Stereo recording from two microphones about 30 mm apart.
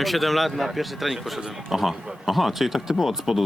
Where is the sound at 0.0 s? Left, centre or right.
Centre.